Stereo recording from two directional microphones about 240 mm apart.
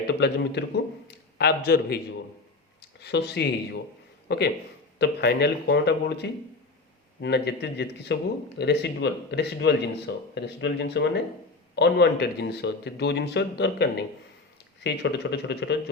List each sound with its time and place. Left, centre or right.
0.1 s a man's voice: left
3.0 s a man's voice: left